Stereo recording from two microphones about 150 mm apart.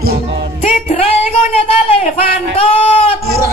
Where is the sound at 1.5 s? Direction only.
40° left (ahead or behind).